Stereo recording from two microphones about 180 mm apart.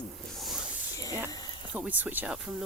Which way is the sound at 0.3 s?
Centre (ahead or behind).